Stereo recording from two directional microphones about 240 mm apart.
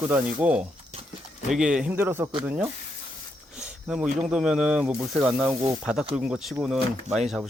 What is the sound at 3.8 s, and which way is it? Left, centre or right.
Speech, centre.